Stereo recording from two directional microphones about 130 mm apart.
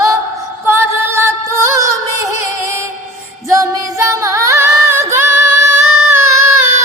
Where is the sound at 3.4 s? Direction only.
25° right (ahead or behind).